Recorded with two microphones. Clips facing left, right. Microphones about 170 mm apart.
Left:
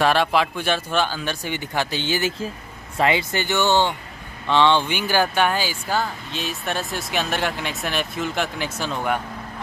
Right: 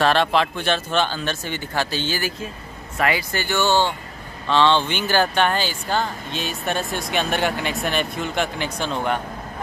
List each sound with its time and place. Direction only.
0.0 s speech: 10° left (ahead or behind)